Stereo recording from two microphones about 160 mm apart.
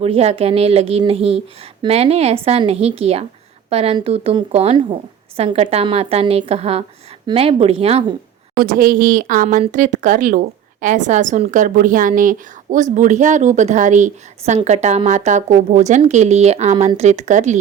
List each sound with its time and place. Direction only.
0.0 s a woman's voice: 40° right (ahead or behind)
8.5 s speech: 60° right (ahead or behind)